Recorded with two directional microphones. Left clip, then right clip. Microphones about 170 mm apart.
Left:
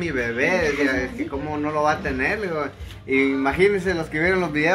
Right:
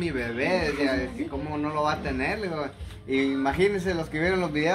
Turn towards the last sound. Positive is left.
turn(degrees=-10)  # may be behind; listen again after turning